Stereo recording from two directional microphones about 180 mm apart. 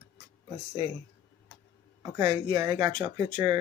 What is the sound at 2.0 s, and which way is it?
Speech, 20° right (ahead or behind).